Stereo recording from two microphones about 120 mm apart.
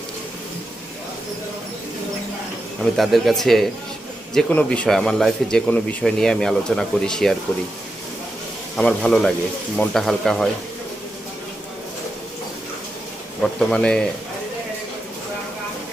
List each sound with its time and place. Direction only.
2.8 s speech: centre (ahead or behind)
8.7 s speech: 10° left (ahead or behind)
13.4 s speech: 5° left (ahead or behind)